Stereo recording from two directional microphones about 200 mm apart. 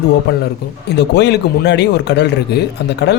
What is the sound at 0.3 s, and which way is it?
A man's voice, 55° left (ahead or behind).